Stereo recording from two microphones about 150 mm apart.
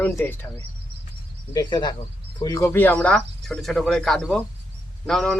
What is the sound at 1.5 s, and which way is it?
Speech, 30° left (ahead or behind).